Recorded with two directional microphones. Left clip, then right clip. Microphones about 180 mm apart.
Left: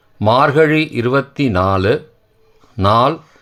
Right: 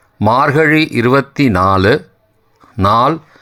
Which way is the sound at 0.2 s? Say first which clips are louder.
Even; 15° right (ahead or behind).